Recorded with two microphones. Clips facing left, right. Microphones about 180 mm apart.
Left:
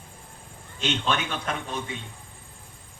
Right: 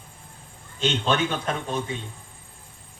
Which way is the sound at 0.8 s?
30° right (ahead or behind).